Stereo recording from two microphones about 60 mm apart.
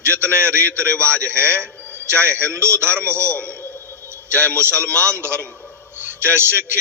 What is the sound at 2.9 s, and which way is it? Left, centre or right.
Speech, right.